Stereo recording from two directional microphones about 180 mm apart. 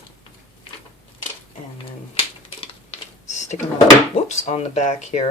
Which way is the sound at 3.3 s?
40° left (ahead or behind).